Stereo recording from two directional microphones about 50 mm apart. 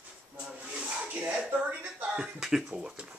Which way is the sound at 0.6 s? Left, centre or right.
Right.